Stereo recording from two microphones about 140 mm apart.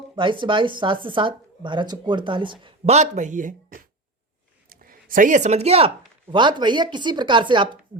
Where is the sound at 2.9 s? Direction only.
55° right (ahead or behind).